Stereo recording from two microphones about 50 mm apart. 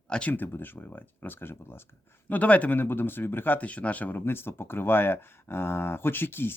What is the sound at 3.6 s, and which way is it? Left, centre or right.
Speech, left.